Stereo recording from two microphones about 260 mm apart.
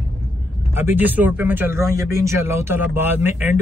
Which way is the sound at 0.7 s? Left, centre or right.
Centre.